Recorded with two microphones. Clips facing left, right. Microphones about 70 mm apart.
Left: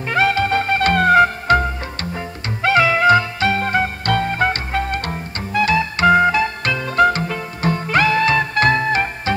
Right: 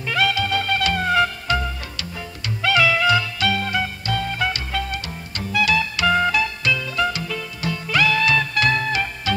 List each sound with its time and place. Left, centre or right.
0.1 s music: left
6.6 s music: left